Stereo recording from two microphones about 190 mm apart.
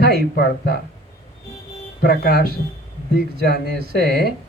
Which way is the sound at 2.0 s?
55° left (ahead or behind).